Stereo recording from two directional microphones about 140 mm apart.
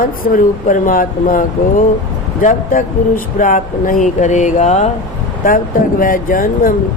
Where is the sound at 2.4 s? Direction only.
70° left (ahead or behind).